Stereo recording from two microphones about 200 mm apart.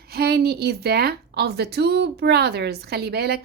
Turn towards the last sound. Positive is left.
turn(degrees=-55)  # may be behind; listen again after turning